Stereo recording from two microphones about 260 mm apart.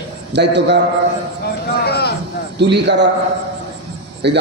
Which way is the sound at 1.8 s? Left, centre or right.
Left.